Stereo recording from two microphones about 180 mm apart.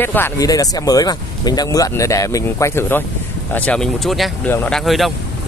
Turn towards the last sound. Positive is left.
turn(degrees=0)  # may be behind; listen again after turning